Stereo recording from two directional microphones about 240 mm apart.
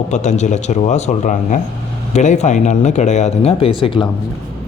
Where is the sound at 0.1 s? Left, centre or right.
Left.